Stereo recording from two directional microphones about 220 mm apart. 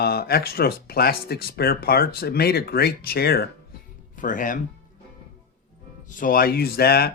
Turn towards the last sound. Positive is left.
turn(degrees=45)  # may be behind; listen again after turning